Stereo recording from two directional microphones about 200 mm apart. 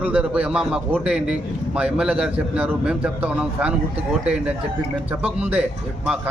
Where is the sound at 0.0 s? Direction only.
5° right (ahead or behind).